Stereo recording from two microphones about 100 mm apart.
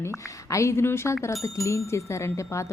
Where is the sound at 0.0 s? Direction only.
30° left (ahead or behind).